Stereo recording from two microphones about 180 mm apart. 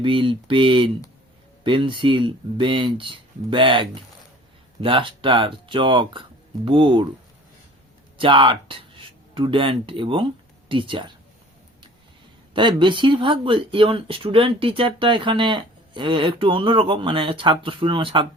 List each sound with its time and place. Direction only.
0.0 s speech: 30° right (ahead or behind)
8.2 s speech: 25° right (ahead or behind)
12.5 s speech: 25° right (ahead or behind)